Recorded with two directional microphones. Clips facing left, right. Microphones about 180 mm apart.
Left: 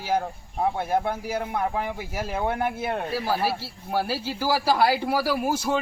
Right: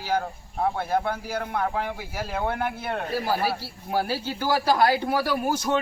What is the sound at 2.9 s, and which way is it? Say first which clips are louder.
A man's voice: even; centre (ahead or behind).